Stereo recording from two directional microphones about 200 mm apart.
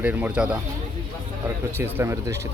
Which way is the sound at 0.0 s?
10° right (ahead or behind).